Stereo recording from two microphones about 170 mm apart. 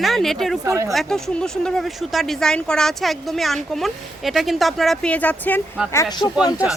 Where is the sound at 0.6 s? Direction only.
15° right (ahead or behind).